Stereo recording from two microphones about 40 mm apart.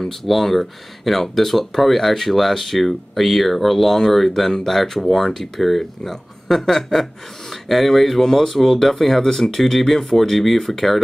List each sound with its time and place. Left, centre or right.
0.0 s speech: centre